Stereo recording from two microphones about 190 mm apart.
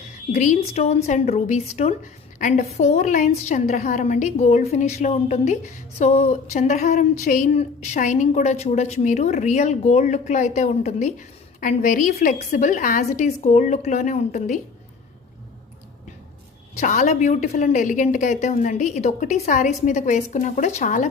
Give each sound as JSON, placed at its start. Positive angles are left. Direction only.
{"t": 0.3, "sound": "a woman's voice", "side_deg": 40}
{"t": 16.7, "sound": "a woman's voice", "side_deg": 40}